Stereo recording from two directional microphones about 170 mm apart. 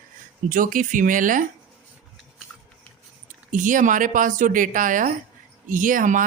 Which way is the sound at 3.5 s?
50° right (ahead or behind).